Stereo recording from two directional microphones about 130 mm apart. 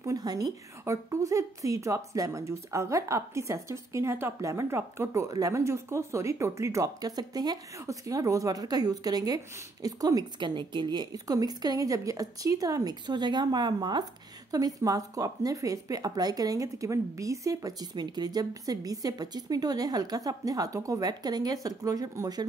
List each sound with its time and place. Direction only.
0.0 s a woman's voice: 30° right (ahead or behind)